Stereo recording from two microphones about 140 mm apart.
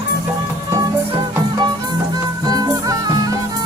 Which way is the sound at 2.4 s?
25° right (ahead or behind).